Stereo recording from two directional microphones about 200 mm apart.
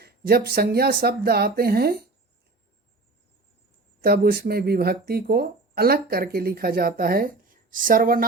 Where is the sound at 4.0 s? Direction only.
50° right (ahead or behind).